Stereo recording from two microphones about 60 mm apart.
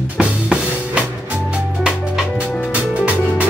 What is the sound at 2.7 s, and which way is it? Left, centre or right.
Music, right.